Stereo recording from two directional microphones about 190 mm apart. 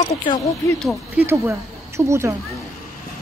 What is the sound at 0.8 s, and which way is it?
Speech, 10° right (ahead or behind).